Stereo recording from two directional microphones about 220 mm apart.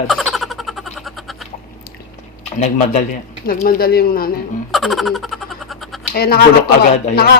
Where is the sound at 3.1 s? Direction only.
40° left (ahead or behind).